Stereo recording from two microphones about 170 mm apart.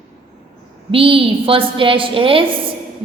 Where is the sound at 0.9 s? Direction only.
30° right (ahead or behind).